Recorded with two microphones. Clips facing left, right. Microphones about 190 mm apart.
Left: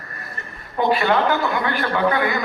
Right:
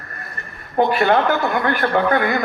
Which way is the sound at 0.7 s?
50° right (ahead or behind).